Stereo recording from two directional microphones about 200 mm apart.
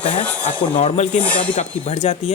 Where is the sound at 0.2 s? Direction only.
5° left (ahead or behind).